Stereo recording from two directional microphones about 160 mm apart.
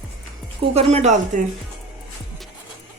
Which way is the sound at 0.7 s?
40° right (ahead or behind).